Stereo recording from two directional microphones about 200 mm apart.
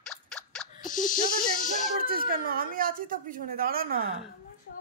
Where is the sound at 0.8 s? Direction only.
40° left (ahead or behind).